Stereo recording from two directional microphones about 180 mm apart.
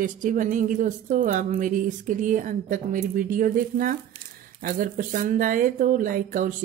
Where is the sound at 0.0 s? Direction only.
45° right (ahead or behind).